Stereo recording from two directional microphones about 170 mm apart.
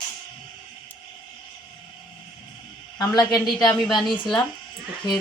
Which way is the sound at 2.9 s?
25° left (ahead or behind).